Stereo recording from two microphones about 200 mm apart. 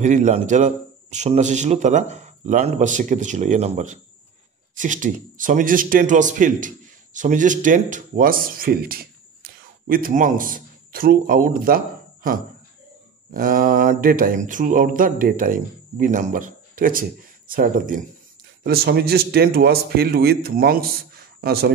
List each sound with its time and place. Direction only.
0.0 s a man's voice: 40° right (ahead or behind)
13.3 s mantra: 45° right (ahead or behind)